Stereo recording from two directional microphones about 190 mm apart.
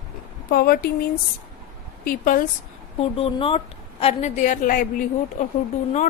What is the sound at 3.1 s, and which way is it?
A woman's voice, 30° left (ahead or behind).